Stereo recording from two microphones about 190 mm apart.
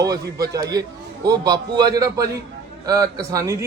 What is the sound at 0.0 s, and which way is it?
A man's voice, 20° right (ahead or behind).